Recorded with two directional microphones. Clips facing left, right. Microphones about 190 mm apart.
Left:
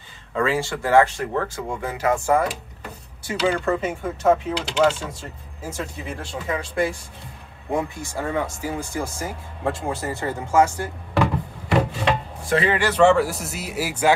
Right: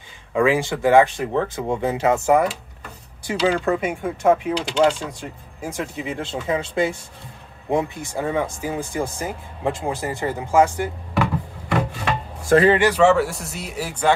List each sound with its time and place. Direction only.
0.3 s speech: 15° right (ahead or behind)
12.4 s a man's voice: 45° right (ahead or behind)
12.7 s speech: 15° right (ahead or behind)
13.0 s speech: centre (ahead or behind)